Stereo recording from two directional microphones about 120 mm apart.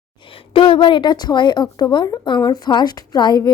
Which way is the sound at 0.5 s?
45° left (ahead or behind).